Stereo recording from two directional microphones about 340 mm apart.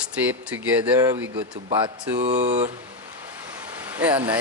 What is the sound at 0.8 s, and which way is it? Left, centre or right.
Chopping, centre.